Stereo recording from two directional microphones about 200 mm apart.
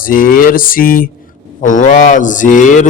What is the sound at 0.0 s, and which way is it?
Speech, 45° left (ahead or behind).